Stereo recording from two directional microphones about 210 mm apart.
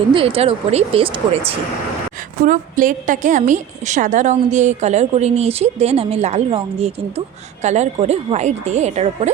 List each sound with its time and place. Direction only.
0.1 s speech: 25° right (ahead or behind)
2.4 s a woman's voice: 40° right (ahead or behind)